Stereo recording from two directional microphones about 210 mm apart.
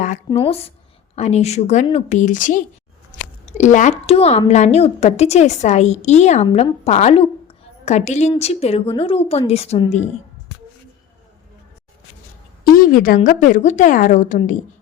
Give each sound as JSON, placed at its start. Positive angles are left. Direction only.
{"t": 0.3, "sound": "a woman's voice", "side_deg": 25}
{"t": 12.7, "sound": "speech", "side_deg": 40}